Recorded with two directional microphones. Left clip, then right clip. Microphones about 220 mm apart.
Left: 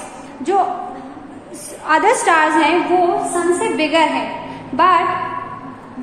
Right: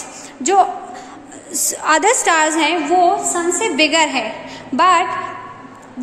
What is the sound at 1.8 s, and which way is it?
A woman's voice, 50° right (ahead or behind).